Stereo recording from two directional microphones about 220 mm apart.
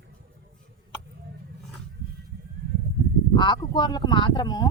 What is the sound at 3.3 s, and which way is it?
Speech, 20° left (ahead or behind).